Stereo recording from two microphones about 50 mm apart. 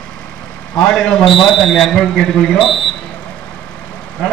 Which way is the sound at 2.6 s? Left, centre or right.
Centre.